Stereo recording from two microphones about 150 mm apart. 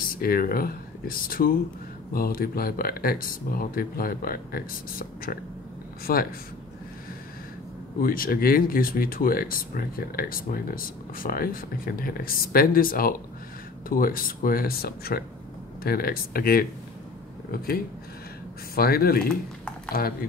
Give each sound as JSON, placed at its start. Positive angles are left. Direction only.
{"t": 0.1, "sound": "speech", "side_deg": 75}
{"t": 8.0, "sound": "speech", "side_deg": 75}
{"t": 18.8, "sound": "speech", "side_deg": 90}